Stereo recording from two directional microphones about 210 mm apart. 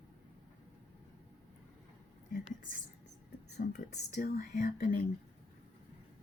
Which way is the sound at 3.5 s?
40° left (ahead or behind).